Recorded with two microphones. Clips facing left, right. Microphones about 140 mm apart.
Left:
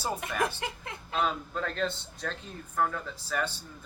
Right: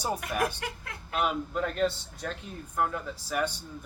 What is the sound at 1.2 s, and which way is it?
Speech, 10° right (ahead or behind).